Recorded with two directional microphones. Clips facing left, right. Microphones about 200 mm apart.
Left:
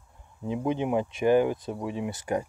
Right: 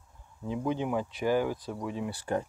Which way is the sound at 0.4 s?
20° left (ahead or behind).